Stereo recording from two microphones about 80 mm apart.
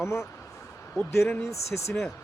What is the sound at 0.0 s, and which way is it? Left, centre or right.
Speech, left.